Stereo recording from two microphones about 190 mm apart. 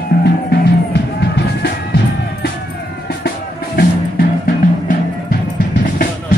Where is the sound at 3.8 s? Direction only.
50° left (ahead or behind).